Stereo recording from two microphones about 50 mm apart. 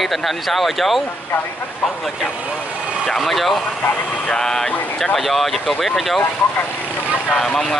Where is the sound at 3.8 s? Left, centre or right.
Left.